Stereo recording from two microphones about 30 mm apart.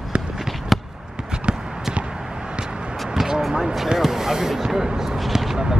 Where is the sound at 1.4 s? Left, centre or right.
Right.